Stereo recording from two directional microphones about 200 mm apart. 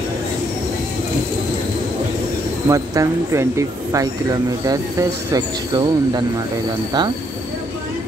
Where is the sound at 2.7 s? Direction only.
15° right (ahead or behind).